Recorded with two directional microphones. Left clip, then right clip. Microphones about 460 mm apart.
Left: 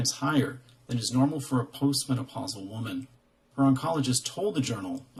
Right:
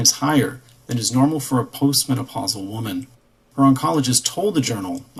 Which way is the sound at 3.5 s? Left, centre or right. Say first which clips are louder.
Right 9 dB; centre.